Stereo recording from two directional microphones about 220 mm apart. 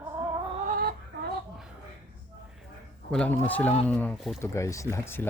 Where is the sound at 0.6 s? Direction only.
40° right (ahead or behind).